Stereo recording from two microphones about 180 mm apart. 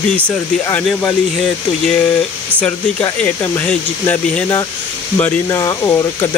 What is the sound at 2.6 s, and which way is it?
Speech, 10° left (ahead or behind).